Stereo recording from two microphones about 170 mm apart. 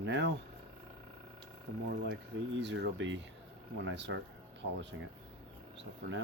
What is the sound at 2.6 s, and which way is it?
Speech, 90° right.